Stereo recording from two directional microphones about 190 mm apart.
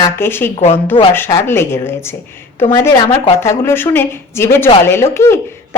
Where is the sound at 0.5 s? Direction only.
35° left (ahead or behind).